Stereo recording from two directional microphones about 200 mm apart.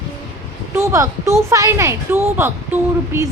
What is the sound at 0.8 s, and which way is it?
Speech, 15° right (ahead or behind).